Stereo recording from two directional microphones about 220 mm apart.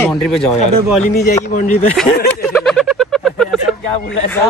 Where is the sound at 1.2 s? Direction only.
35° left (ahead or behind).